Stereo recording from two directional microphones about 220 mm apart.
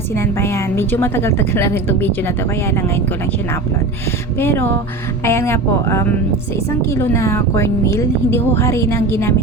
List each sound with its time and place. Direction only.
0.2 s a woman's voice: 10° left (ahead or behind)
4.4 s a woman's voice: 10° left (ahead or behind)